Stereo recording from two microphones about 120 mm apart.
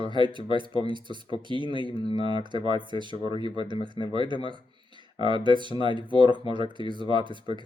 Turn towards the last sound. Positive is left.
turn(degrees=-40)  # may be behind; listen again after turning